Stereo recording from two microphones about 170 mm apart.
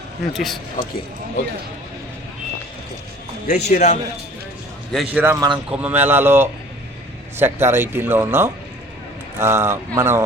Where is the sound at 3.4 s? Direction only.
45° left (ahead or behind).